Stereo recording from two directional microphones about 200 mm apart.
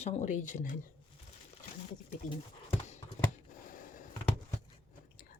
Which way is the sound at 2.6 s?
35° left (ahead or behind).